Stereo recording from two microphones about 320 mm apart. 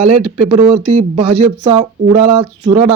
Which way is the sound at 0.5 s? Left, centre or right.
Right.